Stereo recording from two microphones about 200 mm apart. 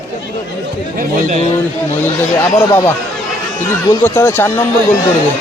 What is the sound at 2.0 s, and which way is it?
Speech, 10° left (ahead or behind).